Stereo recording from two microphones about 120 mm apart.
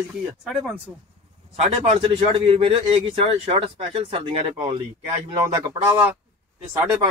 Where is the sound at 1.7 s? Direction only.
60° right (ahead or behind); by 4.4 s 45° right (ahead or behind).